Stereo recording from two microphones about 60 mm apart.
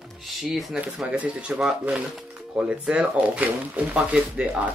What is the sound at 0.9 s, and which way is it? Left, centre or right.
Speech, right.